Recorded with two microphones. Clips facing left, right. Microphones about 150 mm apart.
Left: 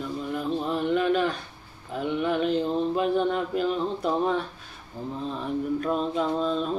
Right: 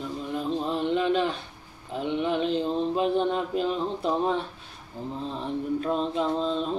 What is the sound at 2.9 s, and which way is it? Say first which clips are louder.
Speech: right 1 dB; 25° right (ahead or behind).